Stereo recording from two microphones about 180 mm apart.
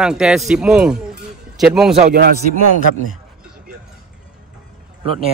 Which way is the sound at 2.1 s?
60° right (ahead or behind).